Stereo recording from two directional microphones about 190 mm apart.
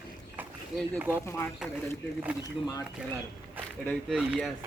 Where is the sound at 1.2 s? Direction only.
15° left (ahead or behind).